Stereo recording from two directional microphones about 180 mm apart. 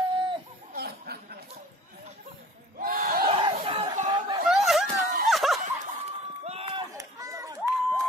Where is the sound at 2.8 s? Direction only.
55° right (ahead or behind).